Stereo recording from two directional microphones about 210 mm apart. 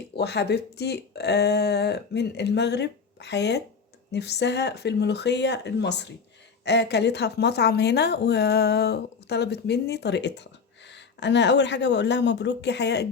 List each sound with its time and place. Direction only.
0.2 s a woman's voice: 50° left (ahead or behind)